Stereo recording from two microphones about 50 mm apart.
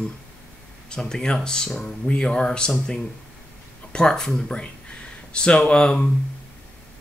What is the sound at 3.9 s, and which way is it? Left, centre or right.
Speech, centre.